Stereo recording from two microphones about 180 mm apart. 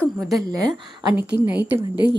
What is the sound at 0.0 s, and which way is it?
A woman's voice, centre (ahead or behind).